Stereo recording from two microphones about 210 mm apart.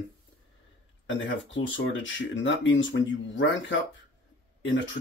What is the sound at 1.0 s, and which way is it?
Speech, 65° left (ahead or behind).